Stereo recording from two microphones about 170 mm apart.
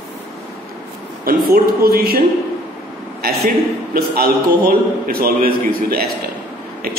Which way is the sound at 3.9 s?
65° right (ahead or behind).